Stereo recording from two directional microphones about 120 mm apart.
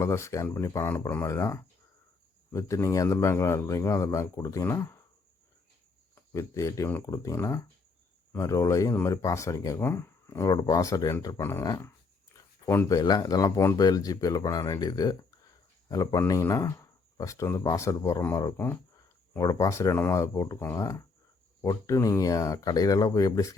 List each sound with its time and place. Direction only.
0.0 s speech: 25° left (ahead or behind)
6.3 s speech: 25° left (ahead or behind)
12.9 s speech: 30° left (ahead or behind)
18.6 s a sound: 15° left (ahead or behind)
19.4 s speech: 30° left (ahead or behind)